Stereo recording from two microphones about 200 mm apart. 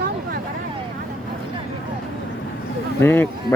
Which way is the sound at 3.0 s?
10° left (ahead or behind).